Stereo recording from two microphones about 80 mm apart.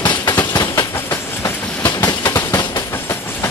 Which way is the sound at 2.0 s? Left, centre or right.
Left.